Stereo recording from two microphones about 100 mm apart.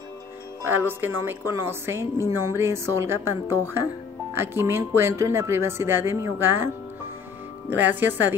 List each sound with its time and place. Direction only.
0.7 s a woman's voice: 20° right (ahead or behind)
7.7 s speech: 20° right (ahead or behind)